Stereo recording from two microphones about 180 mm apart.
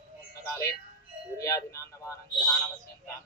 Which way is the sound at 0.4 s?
15° left (ahead or behind).